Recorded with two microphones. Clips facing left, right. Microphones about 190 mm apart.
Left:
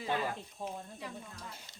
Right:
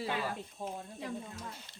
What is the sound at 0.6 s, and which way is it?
Speech, 45° right (ahead or behind).